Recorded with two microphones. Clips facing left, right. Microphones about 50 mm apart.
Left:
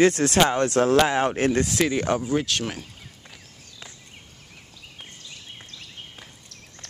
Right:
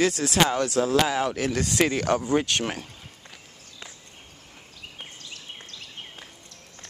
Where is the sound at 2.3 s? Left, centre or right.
Centre.